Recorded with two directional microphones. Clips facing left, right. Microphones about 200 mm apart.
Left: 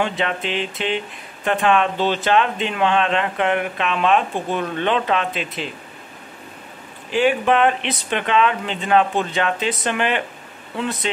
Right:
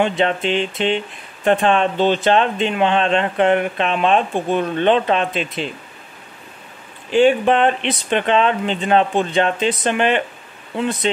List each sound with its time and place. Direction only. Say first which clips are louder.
0.0 s speech: right 5 dB; 25° right (ahead or behind)
7.2 s speech: right 3 dB; 30° right (ahead or behind)